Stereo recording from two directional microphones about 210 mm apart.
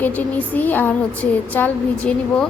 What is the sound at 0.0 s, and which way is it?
Speech, 5° left (ahead or behind).